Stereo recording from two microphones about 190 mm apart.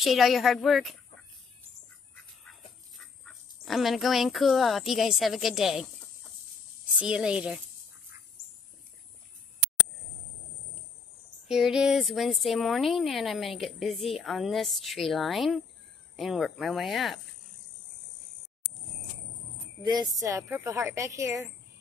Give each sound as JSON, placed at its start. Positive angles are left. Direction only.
{"t": 0.0, "sound": "a woman's voice", "side_deg": 0}
{"t": 3.3, "sound": "a woman's voice", "side_deg": 0}
{"t": 7.0, "sound": "a woman's voice", "side_deg": -5}
{"t": 11.4, "sound": "a woman's voice", "side_deg": -5}
{"t": 19.8, "sound": "a woman's voice", "side_deg": -20}